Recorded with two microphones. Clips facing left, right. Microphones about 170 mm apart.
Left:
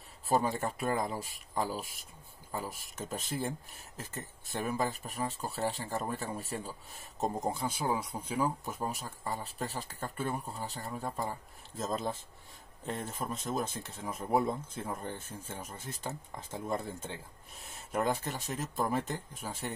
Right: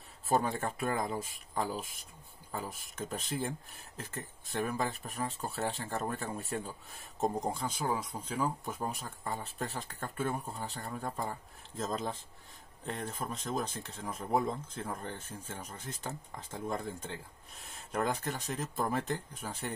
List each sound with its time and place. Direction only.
0.5 s speech: centre (ahead or behind)